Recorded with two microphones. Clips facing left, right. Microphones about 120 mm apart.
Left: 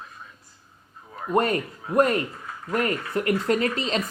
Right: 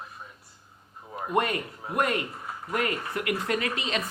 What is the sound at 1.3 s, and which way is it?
Speech, 40° left (ahead or behind).